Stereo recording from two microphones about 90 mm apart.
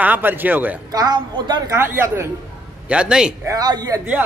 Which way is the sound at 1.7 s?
30° right (ahead or behind).